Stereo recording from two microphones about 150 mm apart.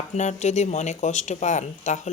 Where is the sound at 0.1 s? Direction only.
50° left (ahead or behind).